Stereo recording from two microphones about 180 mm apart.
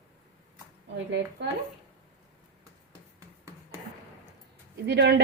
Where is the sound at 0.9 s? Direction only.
85° right.